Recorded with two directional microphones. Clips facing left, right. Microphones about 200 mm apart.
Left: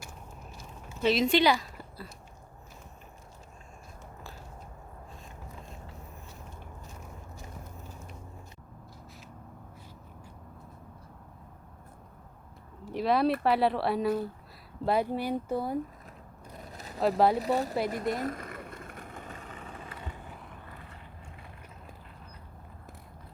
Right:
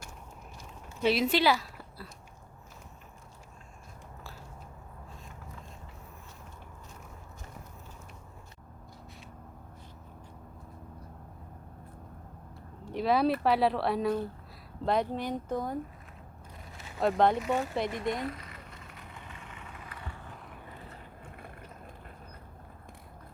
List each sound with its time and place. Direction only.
1.0 s speech: 10° right (ahead or behind)
12.8 s a sound: centre (ahead or behind)
13.4 s a woman's voice: centre (ahead or behind)
16.7 s vehicle: 40° left (ahead or behind)
17.0 s a woman's voice: 5° left (ahead or behind)
17.3 s speech: 35° left (ahead or behind)
17.8 s vehicle: 40° left (ahead or behind); by 20.1 s 25° left (ahead or behind)